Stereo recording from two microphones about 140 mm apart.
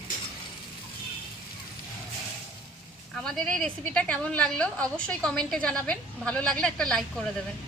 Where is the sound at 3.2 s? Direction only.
5° left (ahead or behind).